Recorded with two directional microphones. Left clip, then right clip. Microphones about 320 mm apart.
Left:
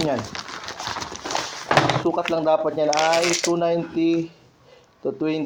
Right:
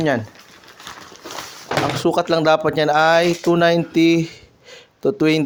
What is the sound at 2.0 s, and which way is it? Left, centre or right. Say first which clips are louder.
Speech: right 5 dB; right.